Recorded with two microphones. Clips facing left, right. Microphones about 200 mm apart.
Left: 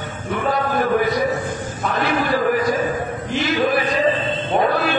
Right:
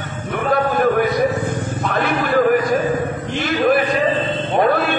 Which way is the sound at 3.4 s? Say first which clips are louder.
Right 3 dB; 55° right (ahead or behind).